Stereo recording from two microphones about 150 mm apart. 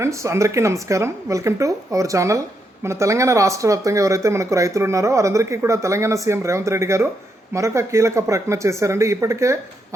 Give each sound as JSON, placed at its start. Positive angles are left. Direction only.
{"t": 0.0, "sound": "speech", "side_deg": -20}